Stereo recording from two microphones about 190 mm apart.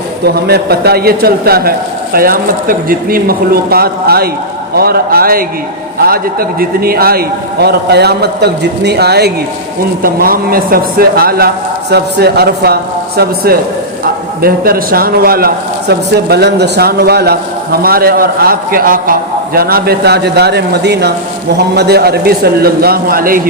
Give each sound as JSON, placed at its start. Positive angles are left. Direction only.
{"t": 0.3, "sound": "a man's voice", "side_deg": -55}